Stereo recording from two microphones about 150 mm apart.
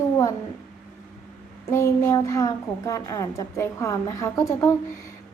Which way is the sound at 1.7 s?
20° left (ahead or behind).